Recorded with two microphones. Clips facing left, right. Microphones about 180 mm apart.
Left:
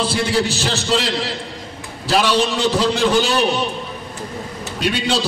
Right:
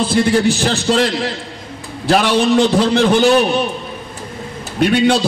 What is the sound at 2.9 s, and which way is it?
Speech, 60° right (ahead or behind).